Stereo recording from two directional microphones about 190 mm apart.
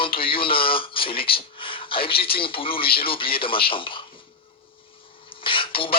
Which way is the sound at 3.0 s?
30° left (ahead or behind).